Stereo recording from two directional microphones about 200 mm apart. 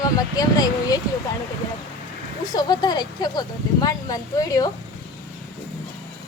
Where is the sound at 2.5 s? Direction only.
20° left (ahead or behind).